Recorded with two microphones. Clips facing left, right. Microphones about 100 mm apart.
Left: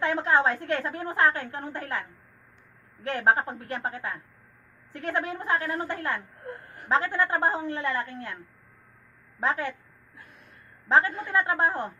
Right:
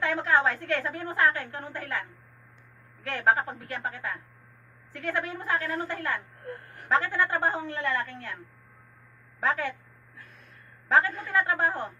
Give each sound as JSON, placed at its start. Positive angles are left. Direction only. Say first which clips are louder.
{"t": 0.0, "sound": "a woman's voice", "louder": "left 1 dB", "side_deg": 30}
{"t": 3.1, "sound": "a woman's voice", "louder": "left 2 dB", "side_deg": 25}
{"t": 9.4, "sound": "a woman's voice", "louder": "even", "side_deg": 30}
{"t": 10.9, "sound": "a woman's voice", "louder": "left 1 dB", "side_deg": 25}